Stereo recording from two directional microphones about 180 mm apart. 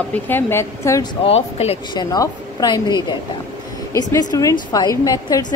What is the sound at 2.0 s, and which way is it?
A woman's voice, 20° left (ahead or behind).